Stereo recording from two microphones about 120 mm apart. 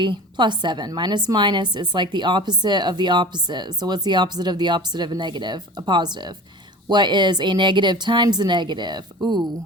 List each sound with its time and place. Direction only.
0.0 s a woman's voice: 40° right (ahead or behind)